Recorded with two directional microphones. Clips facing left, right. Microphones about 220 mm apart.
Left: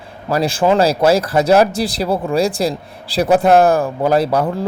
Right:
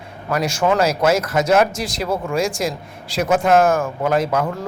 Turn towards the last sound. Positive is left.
turn(degrees=35)  # may be behind; listen again after turning